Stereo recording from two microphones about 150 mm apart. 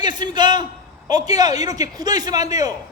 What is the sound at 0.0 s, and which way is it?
A man's voice, 30° right (ahead or behind).